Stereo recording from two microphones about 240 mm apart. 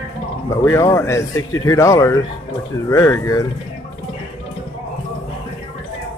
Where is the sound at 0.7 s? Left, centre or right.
Centre.